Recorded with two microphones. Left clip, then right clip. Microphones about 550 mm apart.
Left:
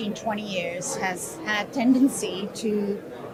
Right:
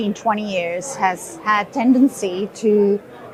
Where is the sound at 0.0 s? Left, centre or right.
Right.